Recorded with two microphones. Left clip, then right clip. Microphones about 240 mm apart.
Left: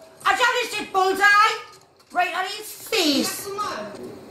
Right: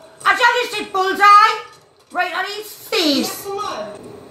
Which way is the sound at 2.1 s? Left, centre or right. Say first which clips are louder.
Right 2 dB; centre.